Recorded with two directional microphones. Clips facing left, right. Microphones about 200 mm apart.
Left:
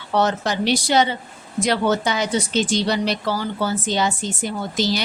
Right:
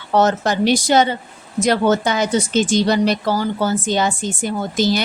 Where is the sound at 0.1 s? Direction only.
45° right (ahead or behind).